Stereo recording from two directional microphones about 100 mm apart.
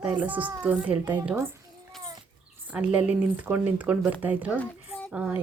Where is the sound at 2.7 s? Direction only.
15° right (ahead or behind).